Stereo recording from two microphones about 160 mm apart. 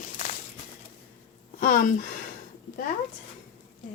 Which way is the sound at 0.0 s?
50° left (ahead or behind).